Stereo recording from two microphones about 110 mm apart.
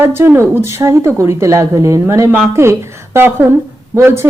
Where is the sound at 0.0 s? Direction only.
20° right (ahead or behind).